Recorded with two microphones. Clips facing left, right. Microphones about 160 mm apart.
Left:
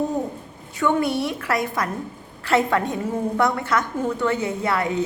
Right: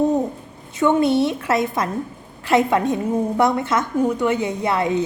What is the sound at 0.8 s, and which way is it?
A woman's voice, 20° right (ahead or behind).